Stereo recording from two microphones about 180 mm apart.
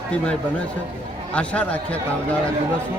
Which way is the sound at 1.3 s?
5° left (ahead or behind).